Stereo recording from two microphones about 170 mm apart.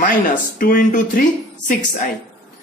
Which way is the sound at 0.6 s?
55° left (ahead or behind).